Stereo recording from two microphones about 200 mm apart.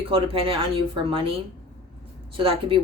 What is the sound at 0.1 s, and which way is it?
Speech, 25° right (ahead or behind).